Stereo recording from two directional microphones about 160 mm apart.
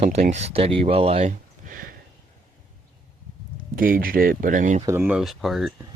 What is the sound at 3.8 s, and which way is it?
Speech, 65° right (ahead or behind).